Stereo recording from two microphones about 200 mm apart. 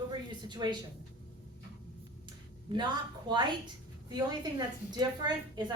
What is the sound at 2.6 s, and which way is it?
A woman's voice, 20° right (ahead or behind).